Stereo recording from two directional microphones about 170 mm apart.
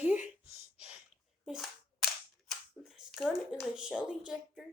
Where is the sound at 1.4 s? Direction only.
Centre (ahead or behind).